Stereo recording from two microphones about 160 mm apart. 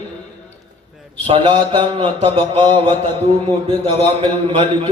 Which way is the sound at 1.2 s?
35° right (ahead or behind).